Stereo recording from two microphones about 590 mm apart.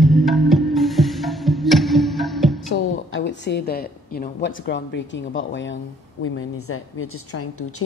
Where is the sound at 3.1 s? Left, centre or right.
Centre.